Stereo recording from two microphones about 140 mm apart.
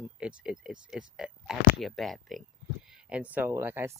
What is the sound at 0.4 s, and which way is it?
Speech, 5° right (ahead or behind).